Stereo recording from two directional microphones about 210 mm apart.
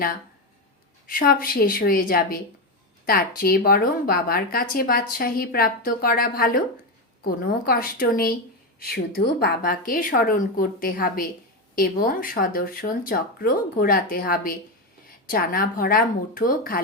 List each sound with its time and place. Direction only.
1.0 s a woman's voice: 45° left (ahead or behind)